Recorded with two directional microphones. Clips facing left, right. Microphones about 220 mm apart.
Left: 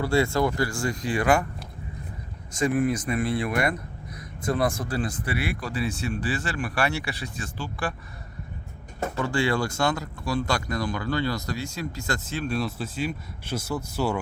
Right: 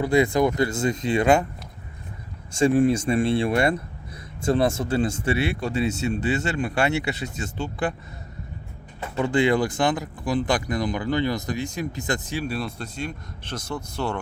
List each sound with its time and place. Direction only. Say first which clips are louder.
0.0 s speech: right 3 dB; 15° right (ahead or behind)
2.5 s speech: right 5 dB; 30° right (ahead or behind)
9.1 s speech: right 5 dB; 20° right (ahead or behind)
12.5 s speech: left 2 dB; 5° left (ahead or behind)